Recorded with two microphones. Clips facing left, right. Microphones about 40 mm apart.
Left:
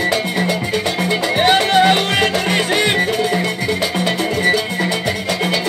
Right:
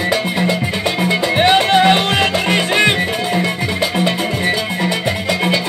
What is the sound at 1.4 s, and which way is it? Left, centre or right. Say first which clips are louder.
Music: right 1 dB; right.